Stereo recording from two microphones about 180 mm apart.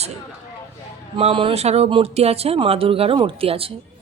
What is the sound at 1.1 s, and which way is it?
Speech, 30° right (ahead or behind).